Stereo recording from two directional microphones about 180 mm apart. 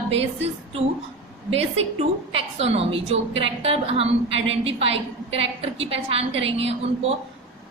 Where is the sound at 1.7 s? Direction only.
35° right (ahead or behind).